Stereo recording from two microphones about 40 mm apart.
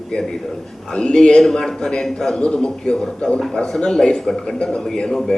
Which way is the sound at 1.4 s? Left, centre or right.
Centre.